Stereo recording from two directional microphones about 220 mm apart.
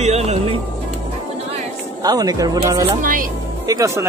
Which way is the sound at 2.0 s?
15° right (ahead or behind).